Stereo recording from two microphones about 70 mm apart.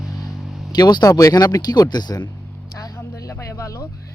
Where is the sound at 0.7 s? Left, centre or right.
Left.